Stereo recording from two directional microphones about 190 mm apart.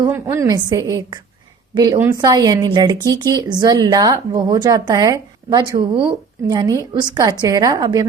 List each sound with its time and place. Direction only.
0.0 s a woman's voice: 15° right (ahead or behind)